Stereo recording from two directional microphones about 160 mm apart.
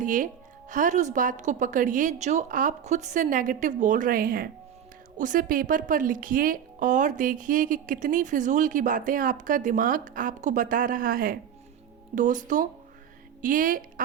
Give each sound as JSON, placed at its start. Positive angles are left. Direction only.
{"t": 0.0, "sound": "a woman's voice", "side_deg": -55}
{"t": 12.1, "sound": "a woman's voice", "side_deg": -50}